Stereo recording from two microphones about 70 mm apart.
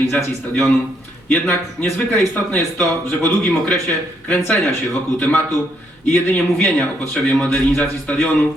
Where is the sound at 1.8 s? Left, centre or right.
Centre.